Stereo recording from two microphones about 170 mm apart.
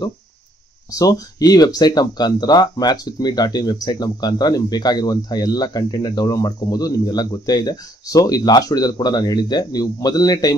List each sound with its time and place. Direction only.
0.9 s speech: 20° left (ahead or behind)